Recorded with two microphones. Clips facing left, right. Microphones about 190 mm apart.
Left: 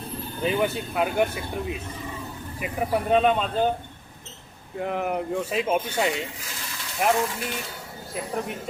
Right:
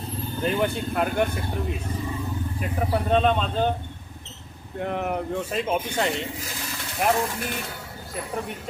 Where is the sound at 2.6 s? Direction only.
5° left (ahead or behind).